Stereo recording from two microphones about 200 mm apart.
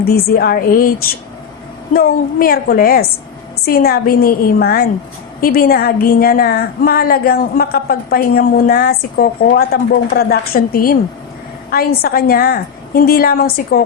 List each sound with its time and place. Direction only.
0.0 s a woman's voice: 50° left (ahead or behind)